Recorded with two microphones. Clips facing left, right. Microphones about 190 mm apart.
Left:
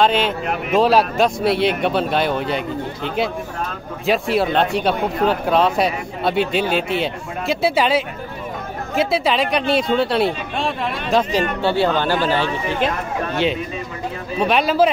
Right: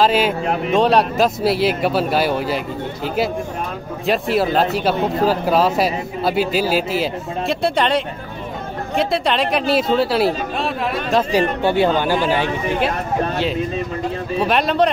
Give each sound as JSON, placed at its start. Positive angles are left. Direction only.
{"t": 0.0, "sound": "speech", "side_deg": -5}
{"t": 11.6, "sound": "speech", "side_deg": -15}
{"t": 14.4, "sound": "speech", "side_deg": 0}